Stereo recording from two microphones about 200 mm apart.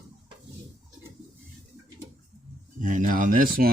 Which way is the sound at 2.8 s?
40° right (ahead or behind).